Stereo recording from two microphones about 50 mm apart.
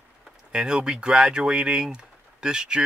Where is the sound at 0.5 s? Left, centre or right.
Centre.